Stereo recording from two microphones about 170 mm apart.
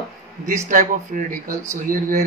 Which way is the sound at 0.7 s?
50° right (ahead or behind).